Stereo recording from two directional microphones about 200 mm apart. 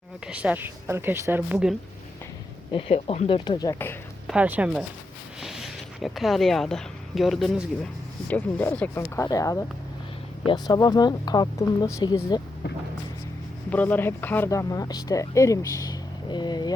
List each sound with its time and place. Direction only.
0.3 s speech: 5° right (ahead or behind)
2.7 s speech: 30° left (ahead or behind); by 3.9 s 15° left (ahead or behind)
4.3 s speech: 5° right (ahead or behind); by 12.1 s 20° left (ahead or behind)
13.7 s speech: 10° left (ahead or behind)